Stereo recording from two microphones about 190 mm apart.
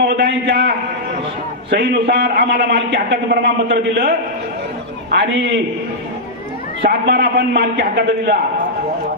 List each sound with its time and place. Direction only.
0.1 s a sound: 60° right (ahead or behind)
1.7 s a man's voice: 65° right (ahead or behind)
6.8 s a man's voice: 65° right (ahead or behind)